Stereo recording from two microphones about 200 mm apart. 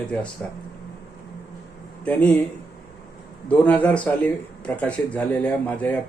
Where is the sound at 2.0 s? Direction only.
5° left (ahead or behind).